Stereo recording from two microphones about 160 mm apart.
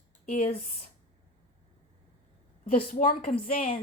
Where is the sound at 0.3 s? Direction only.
45° left (ahead or behind).